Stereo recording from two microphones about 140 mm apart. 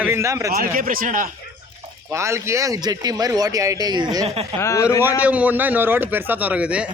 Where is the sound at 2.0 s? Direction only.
20° right (ahead or behind).